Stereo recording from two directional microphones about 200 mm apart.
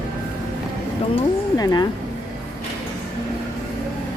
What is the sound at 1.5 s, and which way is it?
Speech, 20° left (ahead or behind).